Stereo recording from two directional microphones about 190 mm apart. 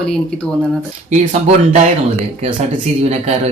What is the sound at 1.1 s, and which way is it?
Speech, 40° right (ahead or behind).